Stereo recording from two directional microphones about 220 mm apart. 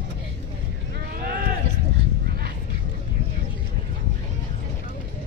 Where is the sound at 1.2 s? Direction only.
45° right (ahead or behind).